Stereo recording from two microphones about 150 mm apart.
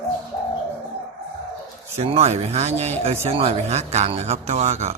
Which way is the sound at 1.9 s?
40° right (ahead or behind).